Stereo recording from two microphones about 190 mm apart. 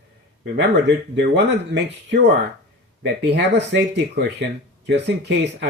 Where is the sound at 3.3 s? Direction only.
65° right (ahead or behind).